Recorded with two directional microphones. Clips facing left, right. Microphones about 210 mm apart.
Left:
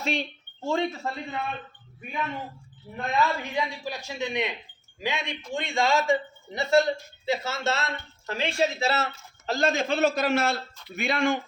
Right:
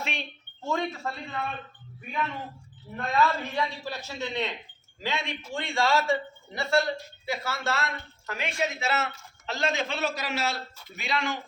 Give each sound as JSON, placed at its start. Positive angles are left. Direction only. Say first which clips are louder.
{"t": 0.0, "sound": "a woman's voice", "louder": "left 7 dB", "side_deg": 35}
{"t": 2.9, "sound": "a man's voice", "louder": "even", "side_deg": 15}
{"t": 9.5, "sound": "a man's voice", "louder": "left 5 dB", "side_deg": 45}